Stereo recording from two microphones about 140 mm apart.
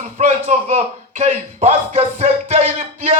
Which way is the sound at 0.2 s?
55° right (ahead or behind).